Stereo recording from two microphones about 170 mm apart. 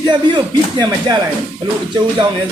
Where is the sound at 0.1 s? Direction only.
25° right (ahead or behind).